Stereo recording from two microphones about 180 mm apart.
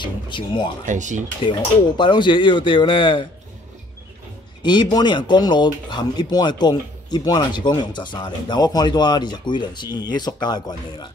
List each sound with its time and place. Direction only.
0.0 s a sound: 25° left (ahead or behind)
0.8 s speech: 45° right (ahead or behind)
2.0 s speech: 25° left (ahead or behind)
4.6 s speech: 25° left (ahead or behind)